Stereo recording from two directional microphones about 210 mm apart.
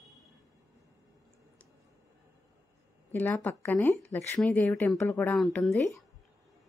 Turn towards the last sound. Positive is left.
turn(degrees=10)  # may be behind; listen again after turning